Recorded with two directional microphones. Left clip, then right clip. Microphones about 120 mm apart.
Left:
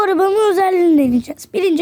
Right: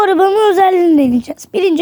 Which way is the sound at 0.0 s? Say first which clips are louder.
Right 4 dB; 10° right (ahead or behind).